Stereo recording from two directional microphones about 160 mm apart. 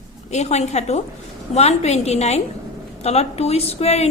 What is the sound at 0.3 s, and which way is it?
A woman's voice, 45° left (ahead or behind).